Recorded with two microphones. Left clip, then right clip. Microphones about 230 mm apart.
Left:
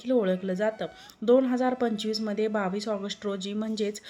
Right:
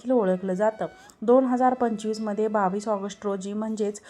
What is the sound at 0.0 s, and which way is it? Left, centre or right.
A woman's voice, centre.